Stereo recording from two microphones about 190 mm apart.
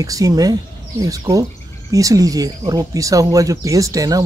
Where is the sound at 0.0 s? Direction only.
20° right (ahead or behind).